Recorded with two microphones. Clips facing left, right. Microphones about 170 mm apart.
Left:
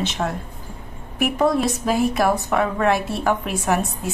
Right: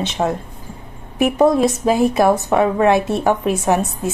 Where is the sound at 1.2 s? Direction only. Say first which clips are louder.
Right 5 dB; 20° right (ahead or behind).